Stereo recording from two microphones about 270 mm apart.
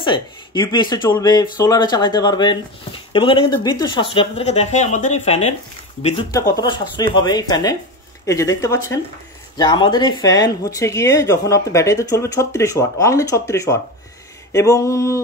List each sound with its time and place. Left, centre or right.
0.0 s speech: centre
6.3 s speech: centre